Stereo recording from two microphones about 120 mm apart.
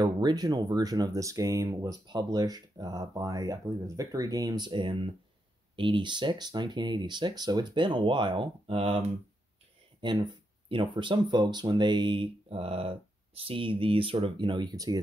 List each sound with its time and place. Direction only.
0.0 s speech: 35° right (ahead or behind); by 8.9 s 55° right (ahead or behind)
9.9 s speech: 40° right (ahead or behind)